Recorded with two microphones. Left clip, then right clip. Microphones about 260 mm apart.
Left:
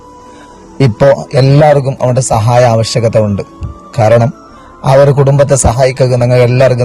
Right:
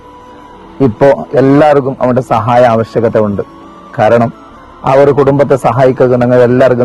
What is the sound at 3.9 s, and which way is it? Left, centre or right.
A man's voice, left.